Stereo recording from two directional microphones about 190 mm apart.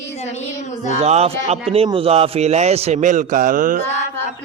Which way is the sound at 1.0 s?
35° right (ahead or behind).